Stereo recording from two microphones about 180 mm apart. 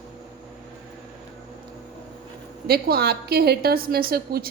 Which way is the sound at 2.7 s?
60° right (ahead or behind).